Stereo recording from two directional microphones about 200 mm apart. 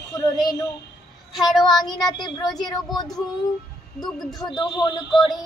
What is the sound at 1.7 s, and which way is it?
Speech, 20° left (ahead or behind).